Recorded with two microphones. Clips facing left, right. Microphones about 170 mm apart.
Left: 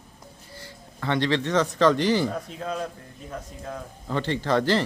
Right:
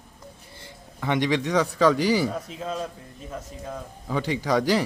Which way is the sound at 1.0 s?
15° right (ahead or behind).